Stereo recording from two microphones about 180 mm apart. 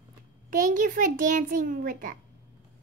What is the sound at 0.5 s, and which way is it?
A child's voice, 45° right (ahead or behind).